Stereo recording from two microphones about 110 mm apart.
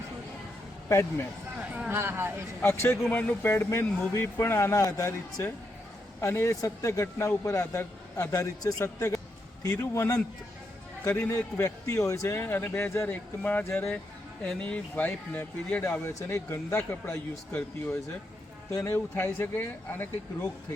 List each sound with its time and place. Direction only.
1.9 s speech: 20° right (ahead or behind)
2.6 s a man's voice: 20° left (ahead or behind)
18.7 s a man's voice: 30° left (ahead or behind)